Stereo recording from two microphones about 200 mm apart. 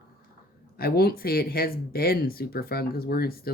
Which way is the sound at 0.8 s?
50° left (ahead or behind).